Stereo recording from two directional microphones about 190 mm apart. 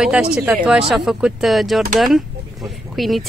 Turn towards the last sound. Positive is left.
turn(degrees=0)  # may be behind; listen again after turning